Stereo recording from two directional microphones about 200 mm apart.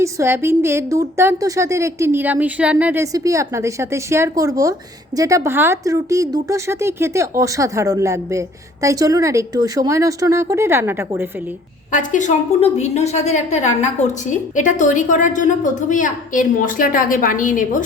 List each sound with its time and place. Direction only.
0.0 s speech: 15° right (ahead or behind)
11.9 s a woman's voice: 40° left (ahead or behind)